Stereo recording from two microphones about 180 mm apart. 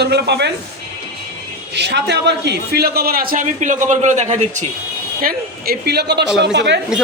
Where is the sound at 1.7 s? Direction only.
70° right (ahead or behind); by 4.6 s 40° right (ahead or behind).